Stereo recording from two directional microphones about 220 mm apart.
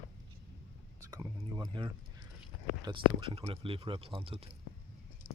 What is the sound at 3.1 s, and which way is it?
Speech, 25° right (ahead or behind).